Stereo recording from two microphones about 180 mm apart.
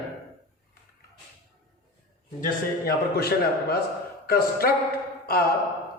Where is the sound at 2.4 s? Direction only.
55° left (ahead or behind).